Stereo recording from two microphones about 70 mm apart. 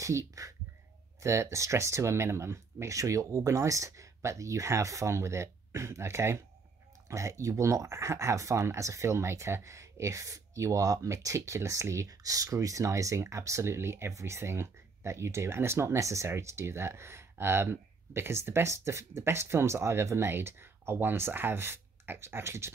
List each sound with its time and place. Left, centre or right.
0.0 s speech: right